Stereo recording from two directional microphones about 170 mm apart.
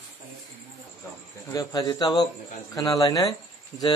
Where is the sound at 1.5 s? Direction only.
20° left (ahead or behind).